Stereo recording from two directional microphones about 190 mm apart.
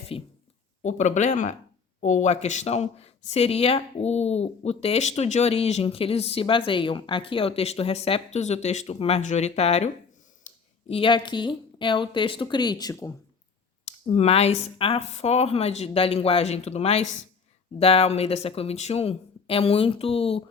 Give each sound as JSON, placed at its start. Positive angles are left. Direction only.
{"t": 0.1, "sound": "a sound", "side_deg": 30}
{"t": 0.8, "sound": "speech", "side_deg": 40}
{"t": 13.8, "sound": "speech", "side_deg": 30}